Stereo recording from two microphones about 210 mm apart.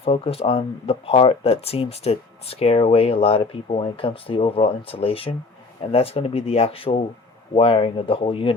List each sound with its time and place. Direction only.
0.0 s speech: 30° left (ahead or behind)